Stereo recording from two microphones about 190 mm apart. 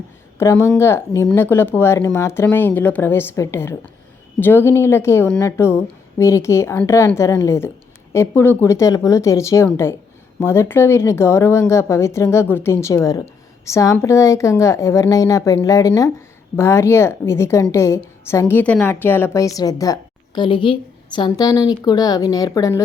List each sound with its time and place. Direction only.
0.3 s a woman's voice: 15° left (ahead or behind)